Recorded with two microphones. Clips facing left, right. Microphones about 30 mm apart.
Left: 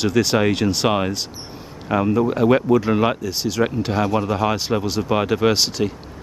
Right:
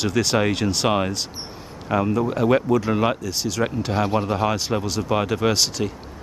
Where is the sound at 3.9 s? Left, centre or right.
Centre.